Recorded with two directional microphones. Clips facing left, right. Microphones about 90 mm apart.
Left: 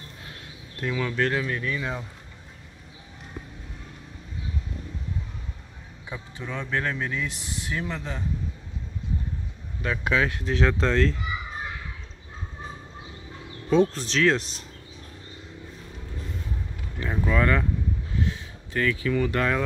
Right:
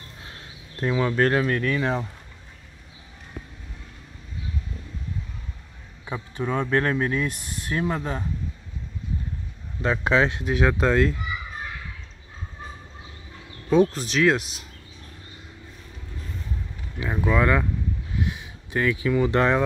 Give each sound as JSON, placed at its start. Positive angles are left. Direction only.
{"t": 0.7, "sound": "speech", "side_deg": -35}
{"t": 6.0, "sound": "speech", "side_deg": -50}
{"t": 9.8, "sound": "speech", "side_deg": -30}
{"t": 10.5, "sound": "speech", "side_deg": -10}
{"t": 13.7, "sound": "speech", "side_deg": -10}
{"t": 17.0, "sound": "speech", "side_deg": -10}
{"t": 18.2, "sound": "a sound", "side_deg": -15}